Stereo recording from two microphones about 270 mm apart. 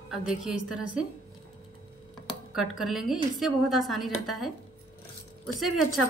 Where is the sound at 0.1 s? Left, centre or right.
Centre.